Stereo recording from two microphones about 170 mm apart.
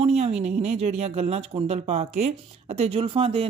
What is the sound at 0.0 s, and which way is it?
Speech, 40° right (ahead or behind).